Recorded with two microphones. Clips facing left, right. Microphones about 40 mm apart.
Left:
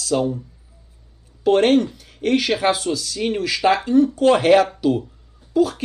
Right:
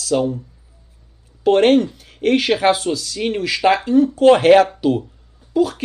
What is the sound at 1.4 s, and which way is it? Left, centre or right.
Speech, centre.